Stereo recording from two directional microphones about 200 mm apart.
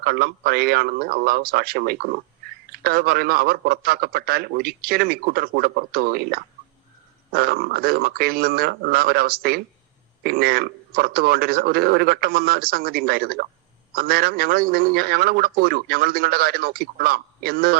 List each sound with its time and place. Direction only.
0.0 s a man's voice: 50° right (ahead or behind)